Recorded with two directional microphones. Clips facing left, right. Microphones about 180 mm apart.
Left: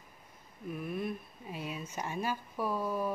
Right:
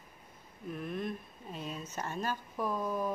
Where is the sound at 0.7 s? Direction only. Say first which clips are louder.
Left 1 dB; 5° left (ahead or behind).